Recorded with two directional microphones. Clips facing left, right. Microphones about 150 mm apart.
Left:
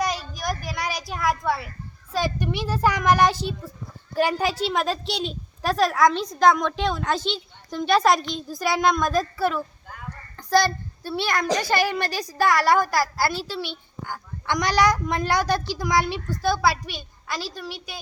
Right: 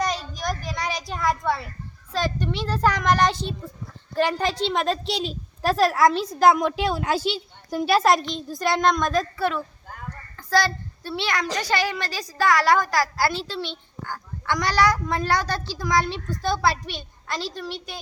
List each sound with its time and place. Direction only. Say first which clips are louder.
0.0 s a sound: even; 5° left (ahead or behind)
2.1 s a woman's voice: even; 10° left (ahead or behind)
10.3 s child singing: left 2 dB; 15° left (ahead or behind)
11.2 s a woman's voice: left 3 dB; 45° left (ahead or behind)
12.1 s a woman's voice: right 2 dB; 15° left (ahead or behind)